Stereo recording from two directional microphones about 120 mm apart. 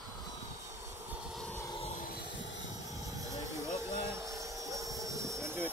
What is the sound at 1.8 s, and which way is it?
Vehicle, 70° left (ahead or behind).